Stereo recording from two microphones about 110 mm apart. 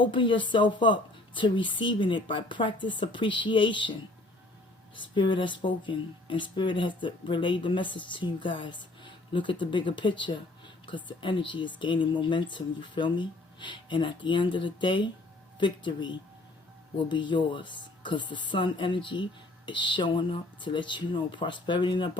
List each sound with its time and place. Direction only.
0.0 s speech: 50° left (ahead or behind)
4.9 s speech: 45° left (ahead or behind)